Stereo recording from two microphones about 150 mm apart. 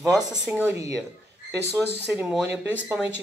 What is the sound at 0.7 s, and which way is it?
Speech, 20° right (ahead or behind).